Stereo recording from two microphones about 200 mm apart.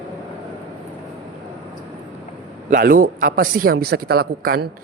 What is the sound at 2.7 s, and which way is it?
Speech, 45° right (ahead or behind).